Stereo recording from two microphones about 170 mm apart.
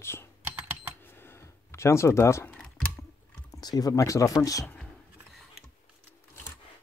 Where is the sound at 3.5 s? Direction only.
20° left (ahead or behind).